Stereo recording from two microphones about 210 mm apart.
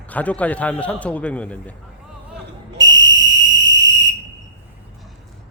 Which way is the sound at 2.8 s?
60° right (ahead or behind).